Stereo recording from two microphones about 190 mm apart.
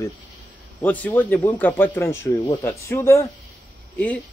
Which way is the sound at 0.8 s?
10° left (ahead or behind).